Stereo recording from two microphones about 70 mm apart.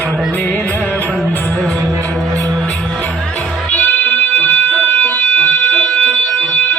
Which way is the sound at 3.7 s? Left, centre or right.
Left.